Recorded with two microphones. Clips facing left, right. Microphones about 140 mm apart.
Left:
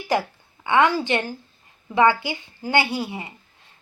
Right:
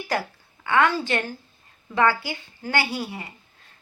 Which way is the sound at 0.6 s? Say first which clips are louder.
Left 2 dB; 20° left (ahead or behind).